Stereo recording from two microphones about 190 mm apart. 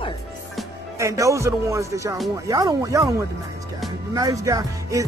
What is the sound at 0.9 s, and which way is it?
Speech, 15° right (ahead or behind).